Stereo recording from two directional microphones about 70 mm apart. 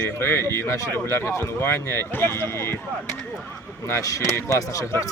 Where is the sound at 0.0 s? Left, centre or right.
Left.